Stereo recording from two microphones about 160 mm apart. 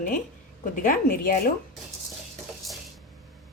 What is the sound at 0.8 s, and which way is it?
Speech, 60° left (ahead or behind).